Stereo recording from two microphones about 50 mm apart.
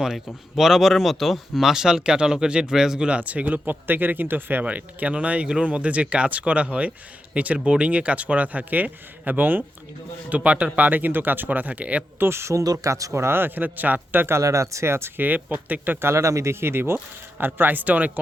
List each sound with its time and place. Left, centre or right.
0.5 s speech: centre
3.1 s speech: right
4.6 s speech: right
10.2 s speech: right
10.8 s speech: right
12.2 s speech: right
13.3 s speech: right
14.3 s speech: right
15.2 s speech: right
16.0 s speech: right
17.3 s speech: right